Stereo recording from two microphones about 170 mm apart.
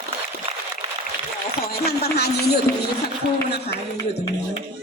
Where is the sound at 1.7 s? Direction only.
65° left (ahead or behind).